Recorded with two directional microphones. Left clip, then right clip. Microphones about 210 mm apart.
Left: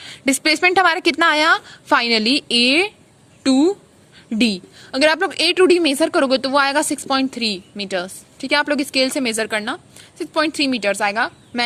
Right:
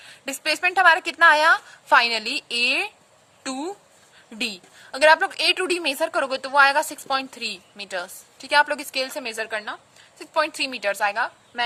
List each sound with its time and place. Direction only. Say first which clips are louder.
0.0 s a woman's voice: left 9 dB; 20° left (ahead or behind)
10.3 s a woman's voice: left 4 dB; 5° left (ahead or behind)